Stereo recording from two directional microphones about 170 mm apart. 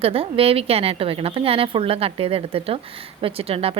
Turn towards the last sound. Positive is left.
turn(degrees=-35)  # may be behind; listen again after turning